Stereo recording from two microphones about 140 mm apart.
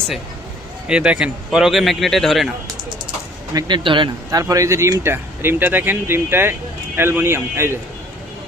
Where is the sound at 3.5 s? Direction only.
35° right (ahead or behind).